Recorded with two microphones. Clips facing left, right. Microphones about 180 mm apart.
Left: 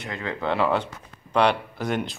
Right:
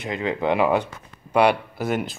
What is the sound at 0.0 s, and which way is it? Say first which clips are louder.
Speech: right 5 dB; 20° right (ahead or behind).